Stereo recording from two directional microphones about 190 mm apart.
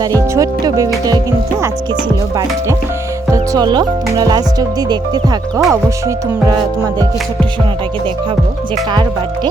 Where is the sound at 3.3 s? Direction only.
20° right (ahead or behind).